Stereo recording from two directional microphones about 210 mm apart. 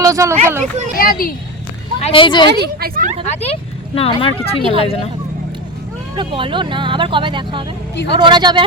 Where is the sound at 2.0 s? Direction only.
25° left (ahead or behind).